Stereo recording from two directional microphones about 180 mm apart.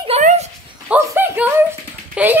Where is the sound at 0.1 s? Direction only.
35° right (ahead or behind).